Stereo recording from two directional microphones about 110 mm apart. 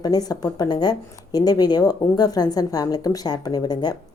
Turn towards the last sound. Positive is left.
turn(degrees=40)  # may be behind; listen again after turning